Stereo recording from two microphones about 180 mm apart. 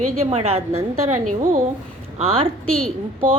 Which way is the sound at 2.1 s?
35° right (ahead or behind).